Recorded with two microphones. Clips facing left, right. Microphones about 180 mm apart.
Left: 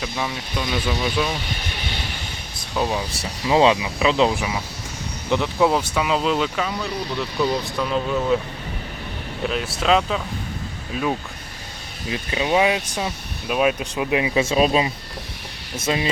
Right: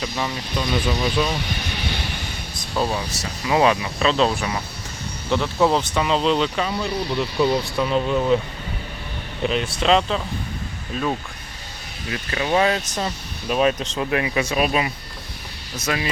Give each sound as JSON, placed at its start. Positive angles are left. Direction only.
{"t": 0.0, "sound": "speech", "side_deg": 0}
{"t": 2.6, "sound": "air conditioning", "side_deg": 0}
{"t": 3.5, "sound": "speech", "side_deg": 20}
{"t": 9.5, "sound": "speech", "side_deg": 5}
{"t": 12.1, "sound": "speech", "side_deg": 15}